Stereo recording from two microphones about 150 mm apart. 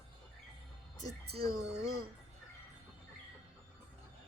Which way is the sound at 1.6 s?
45° right (ahead or behind).